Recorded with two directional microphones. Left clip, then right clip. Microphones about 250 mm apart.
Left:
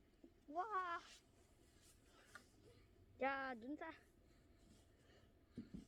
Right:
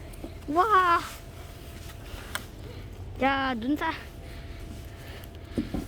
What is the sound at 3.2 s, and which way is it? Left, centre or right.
Speech, centre.